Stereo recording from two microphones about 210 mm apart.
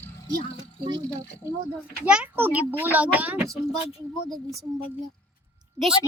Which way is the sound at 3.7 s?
25° left (ahead or behind).